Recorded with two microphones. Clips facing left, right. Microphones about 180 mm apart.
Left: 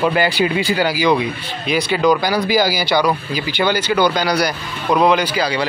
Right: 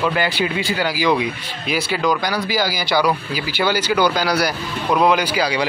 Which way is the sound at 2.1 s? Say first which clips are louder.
Left 6 dB; 20° left (ahead or behind).